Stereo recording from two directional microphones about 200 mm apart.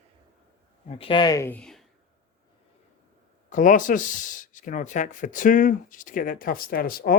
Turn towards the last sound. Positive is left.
turn(degrees=45)  # may be behind; listen again after turning